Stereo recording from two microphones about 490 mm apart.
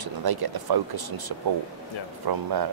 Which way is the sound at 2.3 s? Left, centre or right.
Right.